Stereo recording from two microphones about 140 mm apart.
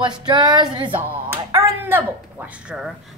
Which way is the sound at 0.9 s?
15° right (ahead or behind).